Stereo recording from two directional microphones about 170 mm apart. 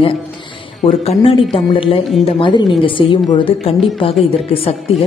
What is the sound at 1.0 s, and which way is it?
A woman's voice, 35° left (ahead or behind).